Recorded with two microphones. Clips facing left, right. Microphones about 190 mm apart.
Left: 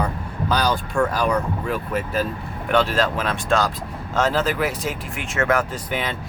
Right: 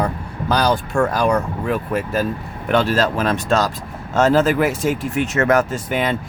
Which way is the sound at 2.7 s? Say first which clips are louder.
Right 3 dB; 45° right (ahead or behind).